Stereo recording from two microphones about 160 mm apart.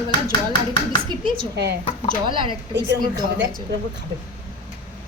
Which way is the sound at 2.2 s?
30° right (ahead or behind).